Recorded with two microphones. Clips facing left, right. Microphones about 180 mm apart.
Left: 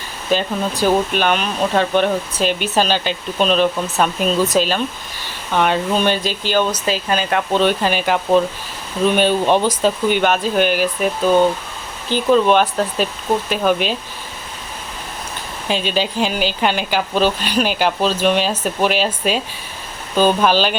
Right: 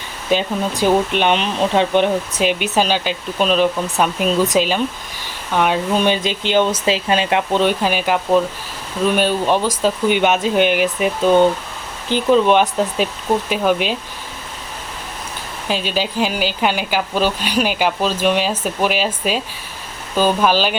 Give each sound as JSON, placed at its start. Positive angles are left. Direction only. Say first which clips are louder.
{"t": 1.1, "sound": "speech", "louder": "right 1 dB", "side_deg": -25}
{"t": 15.6, "sound": "speech", "louder": "left 1 dB", "side_deg": -5}